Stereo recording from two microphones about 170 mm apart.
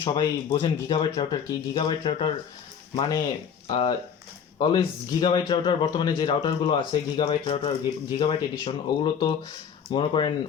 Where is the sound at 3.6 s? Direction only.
30° left (ahead or behind).